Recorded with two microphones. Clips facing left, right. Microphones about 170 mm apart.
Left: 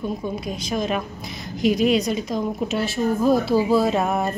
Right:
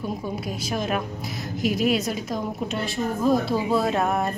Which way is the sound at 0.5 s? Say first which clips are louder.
Left 2 dB; 5° right (ahead or behind).